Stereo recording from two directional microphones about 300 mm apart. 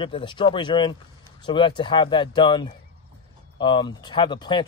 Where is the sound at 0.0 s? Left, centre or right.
Centre.